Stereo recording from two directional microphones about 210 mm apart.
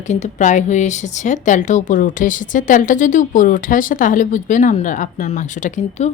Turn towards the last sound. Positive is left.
turn(degrees=35)  # may be behind; listen again after turning